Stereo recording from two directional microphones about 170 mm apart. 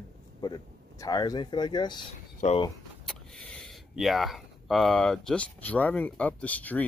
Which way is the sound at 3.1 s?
5° left (ahead or behind).